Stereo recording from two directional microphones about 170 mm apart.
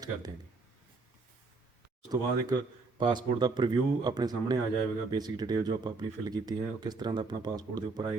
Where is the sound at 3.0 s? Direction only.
25° right (ahead or behind).